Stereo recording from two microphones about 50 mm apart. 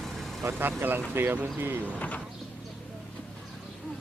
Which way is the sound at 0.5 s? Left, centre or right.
Right.